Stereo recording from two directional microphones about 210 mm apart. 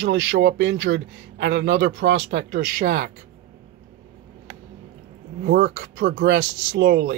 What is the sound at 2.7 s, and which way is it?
Speech, 45° right (ahead or behind).